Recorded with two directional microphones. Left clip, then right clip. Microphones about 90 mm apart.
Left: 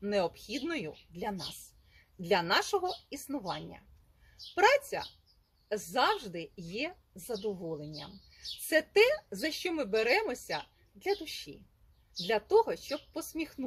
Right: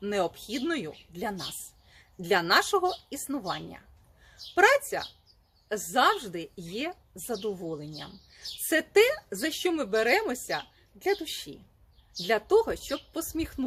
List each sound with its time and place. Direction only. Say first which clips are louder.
0.0 s a woman's voice: right 2 dB; 35° right (ahead or behind)
3.4 s a woman's voice: right 4 dB; 25° right (ahead or behind)
4.5 s a woman's voice: right 4 dB; 35° right (ahead or behind)